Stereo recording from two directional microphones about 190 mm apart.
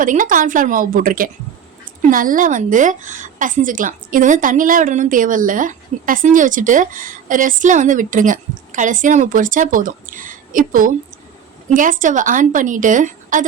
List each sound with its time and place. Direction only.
0.0 s a woman's voice: 45° right (ahead or behind)